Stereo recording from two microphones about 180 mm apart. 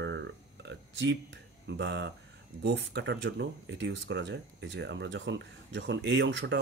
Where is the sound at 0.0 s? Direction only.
80° right.